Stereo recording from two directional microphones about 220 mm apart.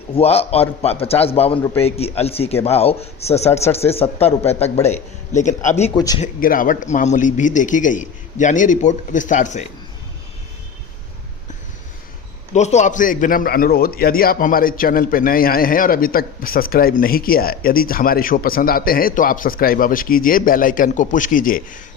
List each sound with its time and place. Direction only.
0.1 s a man's voice: 25° left (ahead or behind)
6.0 s speech: 15° left (ahead or behind)
6.2 s a man's voice: 40° left (ahead or behind)
12.5 s a man's voice: 30° left (ahead or behind)